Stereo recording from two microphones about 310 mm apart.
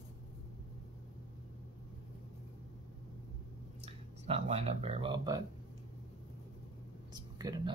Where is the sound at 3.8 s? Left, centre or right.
Centre.